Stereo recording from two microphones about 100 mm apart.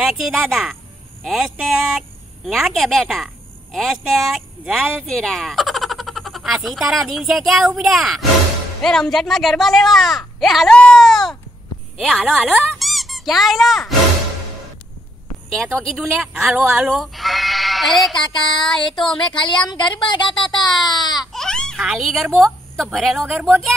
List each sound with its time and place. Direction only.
0.0 s speech: centre (ahead or behind)
10.7 s baby cry: 10° left (ahead or behind)
12.0 s speech: centre (ahead or behind)
15.5 s speech: 5° left (ahead or behind)
16.4 s speech: 10° right (ahead or behind)
18.1 s speech: 55° left (ahead or behind)
18.7 s speech: 5° left (ahead or behind)
19.0 s speech: 55° left (ahead or behind)
21.3 s a sound: 5° left (ahead or behind)
21.7 s speech: 5° right (ahead or behind)